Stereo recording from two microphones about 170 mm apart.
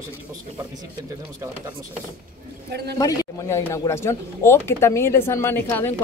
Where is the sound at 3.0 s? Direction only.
20° left (ahead or behind).